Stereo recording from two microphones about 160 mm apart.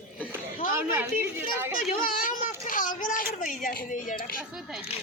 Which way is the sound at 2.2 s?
60° left (ahead or behind).